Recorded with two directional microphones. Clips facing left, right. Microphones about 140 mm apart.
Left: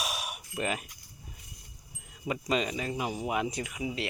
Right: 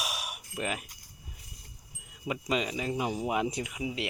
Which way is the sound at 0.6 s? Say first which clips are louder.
Left 2 dB; 5° right (ahead or behind).